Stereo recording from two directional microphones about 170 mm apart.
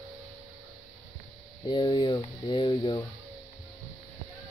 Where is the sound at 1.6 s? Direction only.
25° left (ahead or behind).